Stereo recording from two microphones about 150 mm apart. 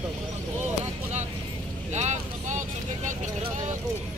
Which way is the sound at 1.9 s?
50° right (ahead or behind).